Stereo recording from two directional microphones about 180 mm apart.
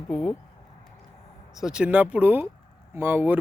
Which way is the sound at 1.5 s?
5° right (ahead or behind).